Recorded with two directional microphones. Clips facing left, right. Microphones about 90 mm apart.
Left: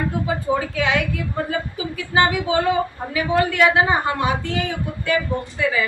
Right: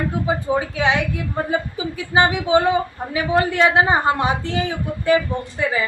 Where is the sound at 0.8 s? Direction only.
25° right (ahead or behind).